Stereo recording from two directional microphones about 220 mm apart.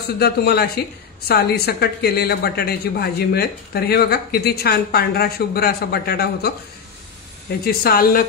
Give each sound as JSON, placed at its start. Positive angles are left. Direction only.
{"t": 0.2, "sound": "speech", "side_deg": 45}
{"t": 7.6, "sound": "speech", "side_deg": 45}